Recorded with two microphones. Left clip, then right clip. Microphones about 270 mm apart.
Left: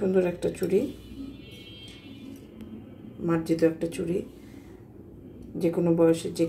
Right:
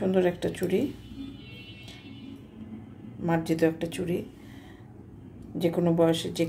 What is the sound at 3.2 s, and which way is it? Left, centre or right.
Speech, right.